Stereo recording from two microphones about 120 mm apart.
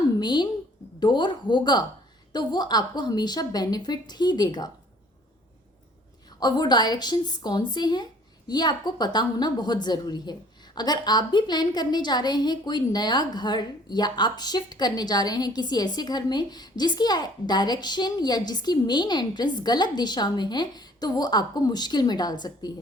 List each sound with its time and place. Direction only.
0.2 s a woman's voice: 35° left (ahead or behind)
6.4 s a woman's voice: 35° left (ahead or behind)